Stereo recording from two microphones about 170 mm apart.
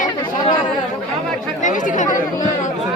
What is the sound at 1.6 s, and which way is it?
Speech, 50° left (ahead or behind).